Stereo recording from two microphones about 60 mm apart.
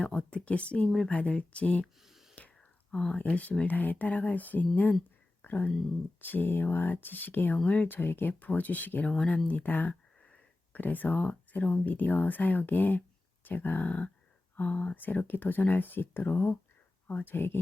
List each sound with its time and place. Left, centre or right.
0.0 s speech: centre
2.0 s whispering: centre
2.9 s speech: centre
3.2 s speech: left
5.4 s a sound: left
6.2 s speech: left; by 9.4 s centre
9.5 s speech: left
9.9 s a sound: centre
10.8 s speech: left